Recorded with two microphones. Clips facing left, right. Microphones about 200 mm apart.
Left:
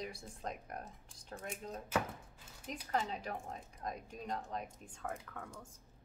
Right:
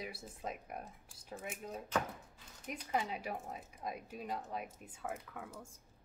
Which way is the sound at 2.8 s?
10° right (ahead or behind).